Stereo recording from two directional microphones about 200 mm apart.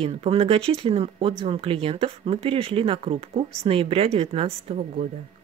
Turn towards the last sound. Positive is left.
turn(degrees=-30)  # may be behind; listen again after turning